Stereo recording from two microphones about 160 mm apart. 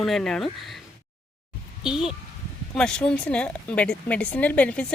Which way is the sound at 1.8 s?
5° right (ahead or behind).